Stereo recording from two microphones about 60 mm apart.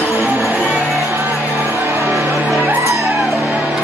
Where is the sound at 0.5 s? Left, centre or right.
Right.